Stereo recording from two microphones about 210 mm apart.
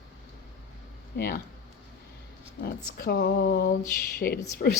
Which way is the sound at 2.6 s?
45° left (ahead or behind).